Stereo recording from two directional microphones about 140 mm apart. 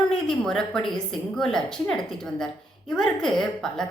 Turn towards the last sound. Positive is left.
turn(degrees=5)  # may be behind; listen again after turning